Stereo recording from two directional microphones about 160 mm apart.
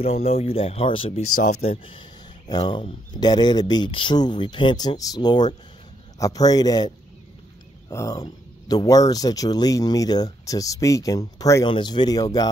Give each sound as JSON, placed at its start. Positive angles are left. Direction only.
{"t": 0.0, "sound": "speech", "side_deg": 40}
{"t": 7.9, "sound": "speech", "side_deg": 20}